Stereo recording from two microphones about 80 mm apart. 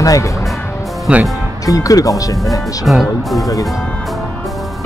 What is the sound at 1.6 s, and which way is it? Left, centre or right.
Speech, left.